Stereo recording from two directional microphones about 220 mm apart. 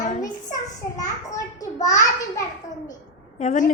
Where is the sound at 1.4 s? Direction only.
15° left (ahead or behind).